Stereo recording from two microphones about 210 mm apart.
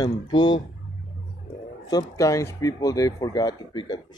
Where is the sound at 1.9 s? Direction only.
15° left (ahead or behind).